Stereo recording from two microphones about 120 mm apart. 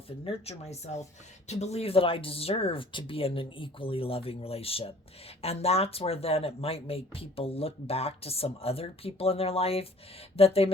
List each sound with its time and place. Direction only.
0.3 s speech: 55° left (ahead or behind)